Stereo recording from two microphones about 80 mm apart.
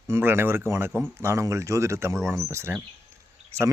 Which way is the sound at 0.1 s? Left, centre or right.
Right.